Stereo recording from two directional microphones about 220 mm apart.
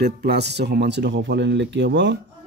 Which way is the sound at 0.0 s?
45° right (ahead or behind).